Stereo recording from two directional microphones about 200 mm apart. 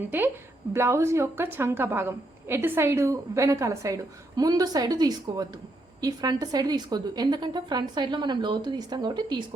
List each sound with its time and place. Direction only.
0.7 s a woman's voice: 15° right (ahead or behind)